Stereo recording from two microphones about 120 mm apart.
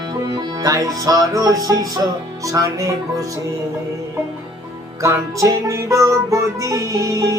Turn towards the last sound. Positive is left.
turn(degrees=-30)  # may be behind; listen again after turning